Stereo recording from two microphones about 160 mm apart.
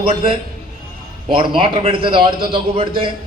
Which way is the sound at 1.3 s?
35° right (ahead or behind).